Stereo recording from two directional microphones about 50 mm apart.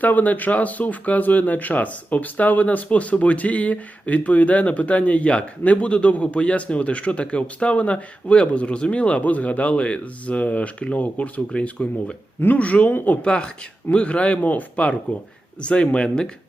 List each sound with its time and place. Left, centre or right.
0.0 s speech: left
12.4 s speech: left; by 16.3 s centre